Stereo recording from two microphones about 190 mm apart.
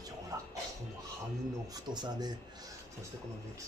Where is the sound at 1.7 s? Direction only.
20° right (ahead or behind).